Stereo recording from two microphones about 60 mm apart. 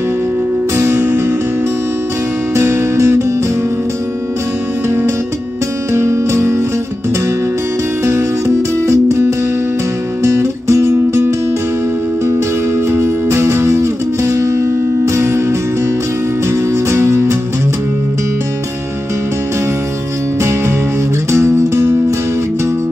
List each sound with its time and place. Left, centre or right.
0.7 s music: right
2.5 s music: right
4.8 s music: right
8.8 s music: right
10.2 s music: right
12.7 s music: right
16.4 s music: right
21.3 s music: right